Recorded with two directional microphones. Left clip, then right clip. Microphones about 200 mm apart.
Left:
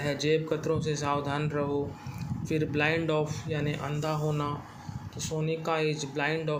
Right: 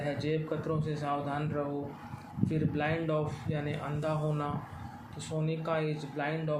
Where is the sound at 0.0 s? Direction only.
45° left (ahead or behind).